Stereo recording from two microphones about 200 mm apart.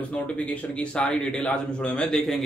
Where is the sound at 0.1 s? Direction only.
5° left (ahead or behind).